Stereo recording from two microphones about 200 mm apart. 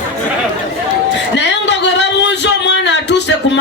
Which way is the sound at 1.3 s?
60° left (ahead or behind).